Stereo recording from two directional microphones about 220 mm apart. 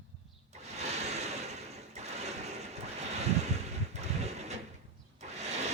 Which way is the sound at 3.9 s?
30° right (ahead or behind).